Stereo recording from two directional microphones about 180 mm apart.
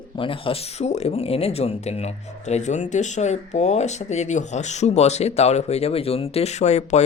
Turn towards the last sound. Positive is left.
turn(degrees=40)  # may be behind; listen again after turning